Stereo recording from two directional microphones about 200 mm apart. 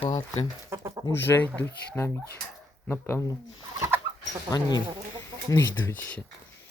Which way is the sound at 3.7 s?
15° right (ahead or behind).